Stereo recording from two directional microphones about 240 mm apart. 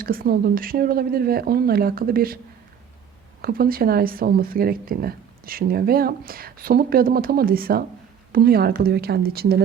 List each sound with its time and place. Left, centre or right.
0.0 s a woman's voice: right
3.4 s a woman's voice: right